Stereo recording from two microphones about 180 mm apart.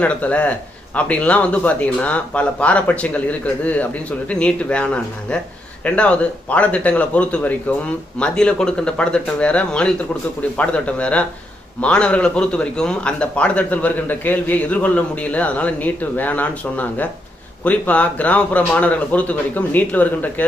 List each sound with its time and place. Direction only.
0.0 s a man's voice: 5° left (ahead or behind)